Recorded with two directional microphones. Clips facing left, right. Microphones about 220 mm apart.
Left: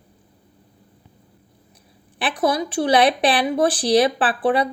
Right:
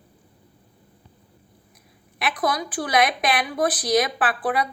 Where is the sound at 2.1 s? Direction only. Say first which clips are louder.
Left 4 dB; 30° left (ahead or behind).